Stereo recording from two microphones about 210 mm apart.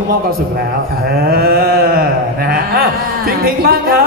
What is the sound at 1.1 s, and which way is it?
A woman's voice, 45° right (ahead or behind).